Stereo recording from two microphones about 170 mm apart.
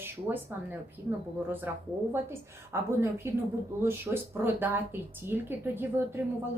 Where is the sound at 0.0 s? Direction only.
10° right (ahead or behind).